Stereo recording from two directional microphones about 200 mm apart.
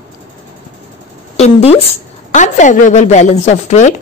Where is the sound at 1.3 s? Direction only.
30° left (ahead or behind).